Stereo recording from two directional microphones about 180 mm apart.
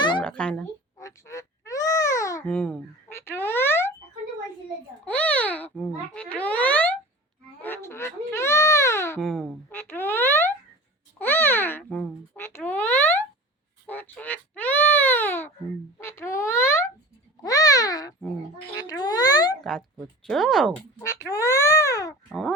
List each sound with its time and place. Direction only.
0.2 s a sound: 5° left (ahead or behind)
0.9 s speech: 15° left (ahead or behind)
5.0 s speech: 10° left (ahead or behind)
20.2 s speech: centre (ahead or behind)
21.0 s speech: 15° left (ahead or behind)
22.3 s speech: 5° left (ahead or behind)